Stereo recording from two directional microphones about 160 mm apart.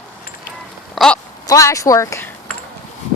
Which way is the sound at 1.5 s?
20° left (ahead or behind).